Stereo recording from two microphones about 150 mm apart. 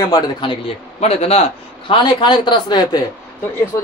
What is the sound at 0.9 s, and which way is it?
A man's voice, 45° left (ahead or behind).